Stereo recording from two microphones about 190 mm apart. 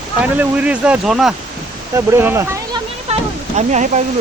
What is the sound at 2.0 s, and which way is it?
Speech, 15° right (ahead or behind).